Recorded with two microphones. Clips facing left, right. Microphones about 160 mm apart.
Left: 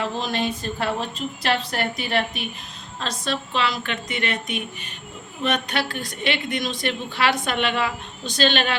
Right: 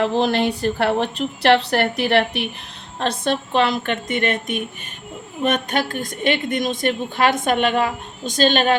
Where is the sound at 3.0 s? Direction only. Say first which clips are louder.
Right 6 dB; 55° right (ahead or behind).